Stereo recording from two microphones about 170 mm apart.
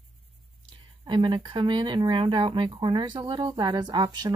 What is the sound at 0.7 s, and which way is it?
Speech, 25° right (ahead or behind).